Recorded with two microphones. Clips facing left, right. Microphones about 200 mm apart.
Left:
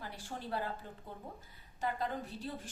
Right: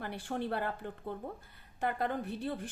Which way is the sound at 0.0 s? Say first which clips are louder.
Right 8 dB; 60° right (ahead or behind).